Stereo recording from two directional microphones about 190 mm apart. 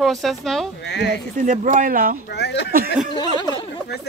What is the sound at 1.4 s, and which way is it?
Speech, 40° right (ahead or behind).